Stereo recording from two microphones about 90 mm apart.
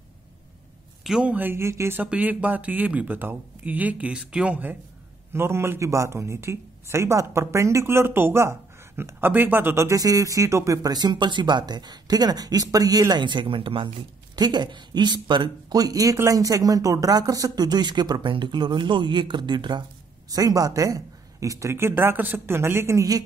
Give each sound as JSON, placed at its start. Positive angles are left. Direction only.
{"t": 1.0, "sound": "speech", "side_deg": -5}
{"t": 1.3, "sound": "speech", "side_deg": -25}
{"t": 2.0, "sound": "speech", "side_deg": -15}
{"t": 5.3, "sound": "speech", "side_deg": -30}
{"t": 13.1, "sound": "speech", "side_deg": -60}
{"t": 14.3, "sound": "speech", "side_deg": -50}
{"t": 20.2, "sound": "speech", "side_deg": -40}